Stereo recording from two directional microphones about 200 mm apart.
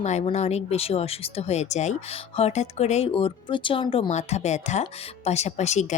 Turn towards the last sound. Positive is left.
turn(degrees=35)  # may be behind; listen again after turning